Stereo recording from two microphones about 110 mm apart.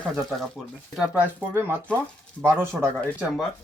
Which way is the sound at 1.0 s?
15° right (ahead or behind).